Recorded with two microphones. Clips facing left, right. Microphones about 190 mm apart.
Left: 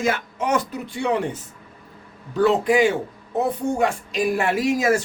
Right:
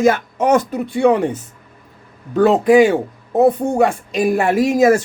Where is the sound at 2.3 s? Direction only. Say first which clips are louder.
Right 7 dB; 50° right (ahead or behind).